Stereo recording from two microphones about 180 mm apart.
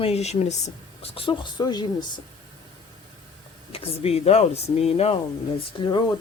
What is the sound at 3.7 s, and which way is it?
Speech, 30° left (ahead or behind).